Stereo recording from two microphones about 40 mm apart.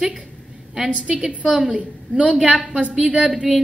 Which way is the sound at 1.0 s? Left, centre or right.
Right.